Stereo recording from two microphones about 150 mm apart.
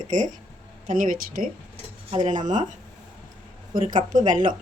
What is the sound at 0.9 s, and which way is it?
Speech, 65° right (ahead or behind).